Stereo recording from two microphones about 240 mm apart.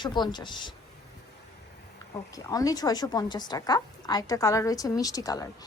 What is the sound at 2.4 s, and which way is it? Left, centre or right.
A woman's voice, centre.